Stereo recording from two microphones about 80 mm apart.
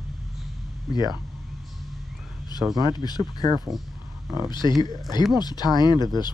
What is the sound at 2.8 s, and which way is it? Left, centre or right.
Speech, left.